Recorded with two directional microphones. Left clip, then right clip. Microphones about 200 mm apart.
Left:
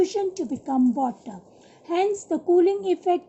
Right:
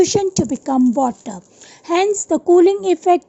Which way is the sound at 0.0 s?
40° right (ahead or behind).